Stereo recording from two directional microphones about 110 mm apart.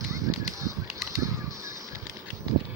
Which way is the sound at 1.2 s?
30° right (ahead or behind).